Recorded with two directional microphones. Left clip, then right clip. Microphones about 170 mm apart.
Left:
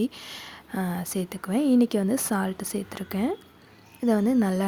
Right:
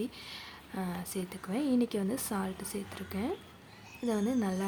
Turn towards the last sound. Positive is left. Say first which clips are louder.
# left 9 dB
turn(degrees=40)  # may be behind; listen again after turning